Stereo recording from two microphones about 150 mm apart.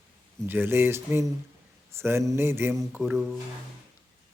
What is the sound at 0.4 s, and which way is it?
Speech, 15° right (ahead or behind).